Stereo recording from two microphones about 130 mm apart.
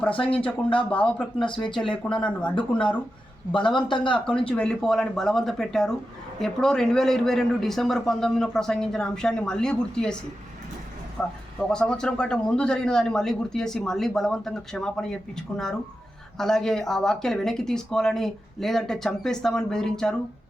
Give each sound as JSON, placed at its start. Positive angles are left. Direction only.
{"t": 0.9, "sound": "speech", "side_deg": 10}
{"t": 1.4, "sound": "speech", "side_deg": 40}
{"t": 2.0, "sound": "speech", "side_deg": 10}
{"t": 3.8, "sound": "speech", "side_deg": 35}
{"t": 4.3, "sound": "a man's voice", "side_deg": 10}
{"t": 11.2, "sound": "a man's voice", "side_deg": 5}